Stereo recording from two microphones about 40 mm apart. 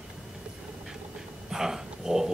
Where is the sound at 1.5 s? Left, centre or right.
Centre.